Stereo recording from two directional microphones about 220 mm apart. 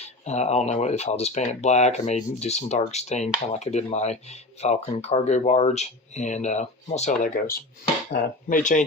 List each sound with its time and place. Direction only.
0.3 s speech: 30° left (ahead or behind)